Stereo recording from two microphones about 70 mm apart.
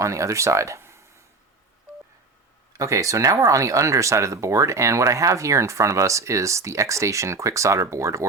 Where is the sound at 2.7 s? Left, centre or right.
Right.